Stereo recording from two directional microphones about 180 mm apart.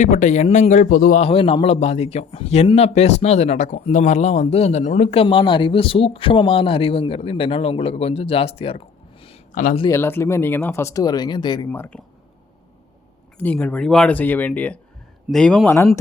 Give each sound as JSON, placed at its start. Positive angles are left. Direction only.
{"t": 0.0, "sound": "speech", "side_deg": 45}
{"t": 1.2, "sound": "a man's voice", "side_deg": 30}
{"t": 9.5, "sound": "speech", "side_deg": 45}
{"t": 9.9, "sound": "speech", "side_deg": 15}
{"t": 11.7, "sound": "speech", "side_deg": 10}
{"t": 13.4, "sound": "speech", "side_deg": 10}